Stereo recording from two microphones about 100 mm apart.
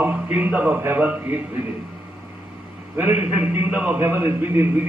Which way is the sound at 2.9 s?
15° right (ahead or behind).